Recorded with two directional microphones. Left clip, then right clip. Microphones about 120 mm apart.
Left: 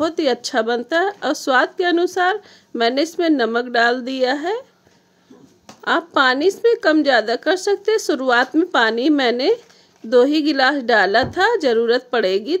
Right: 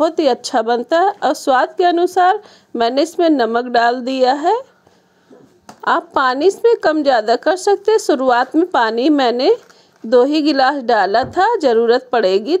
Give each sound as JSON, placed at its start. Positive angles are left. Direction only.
{"t": 0.0, "sound": "speech", "side_deg": -15}
{"t": 5.9, "sound": "speech", "side_deg": -15}